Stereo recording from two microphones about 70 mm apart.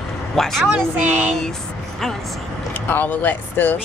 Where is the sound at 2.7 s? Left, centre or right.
Left.